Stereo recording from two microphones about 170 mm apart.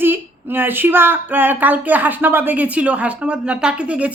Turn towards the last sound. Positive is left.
turn(degrees=-10)  # may be behind; listen again after turning